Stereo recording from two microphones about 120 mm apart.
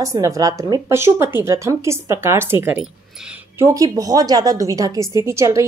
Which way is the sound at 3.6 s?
25° right (ahead or behind).